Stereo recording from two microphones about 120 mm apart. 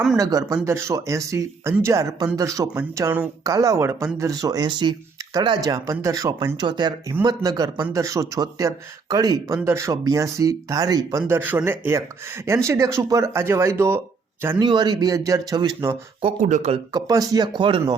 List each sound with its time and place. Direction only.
0.2 s speech: 30° right (ahead or behind)
11.3 s speech: 15° right (ahead or behind)
14.6 s speech: 35° right (ahead or behind)
16.2 s speech: 75° right (ahead or behind)
16.9 s speech: 30° right (ahead or behind)